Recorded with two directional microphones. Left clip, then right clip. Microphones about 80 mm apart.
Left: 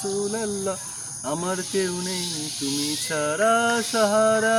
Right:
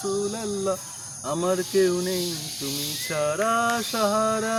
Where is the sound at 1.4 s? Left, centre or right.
Right.